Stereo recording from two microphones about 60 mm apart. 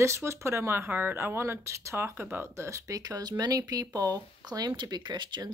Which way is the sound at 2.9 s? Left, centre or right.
Right.